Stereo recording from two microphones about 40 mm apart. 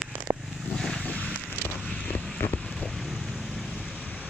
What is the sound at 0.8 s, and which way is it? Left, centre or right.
Vehicle, centre.